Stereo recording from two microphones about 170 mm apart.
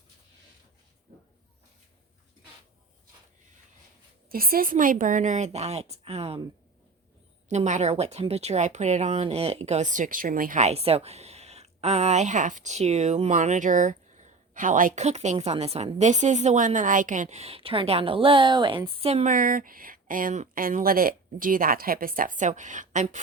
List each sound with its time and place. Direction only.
4.3 s speech: 60° right (ahead or behind); by 6.4 s 35° right (ahead or behind)
7.5 s speech: 45° right (ahead or behind)
19.3 s speech: 55° right (ahead or behind)